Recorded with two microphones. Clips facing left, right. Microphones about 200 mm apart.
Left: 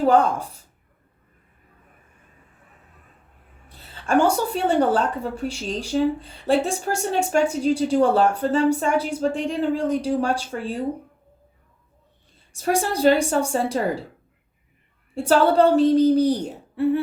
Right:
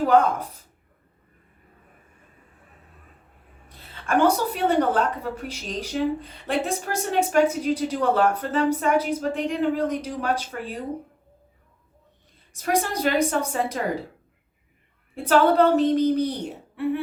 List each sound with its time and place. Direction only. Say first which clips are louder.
0.0 s speech: left 1 dB; 30° left (ahead or behind)
3.9 s a woman's voice: left 1 dB; 30° left (ahead or behind)
12.6 s speech: left 5 dB; 30° left (ahead or behind)
15.1 s speech: left 1 dB; 30° left (ahead or behind)